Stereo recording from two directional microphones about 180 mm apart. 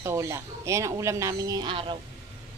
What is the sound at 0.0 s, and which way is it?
Speech, 15° right (ahead or behind).